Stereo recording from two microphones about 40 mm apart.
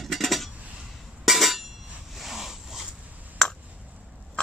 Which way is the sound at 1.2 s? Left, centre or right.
Centre.